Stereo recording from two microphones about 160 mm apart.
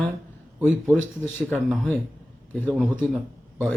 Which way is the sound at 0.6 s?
15° right (ahead or behind).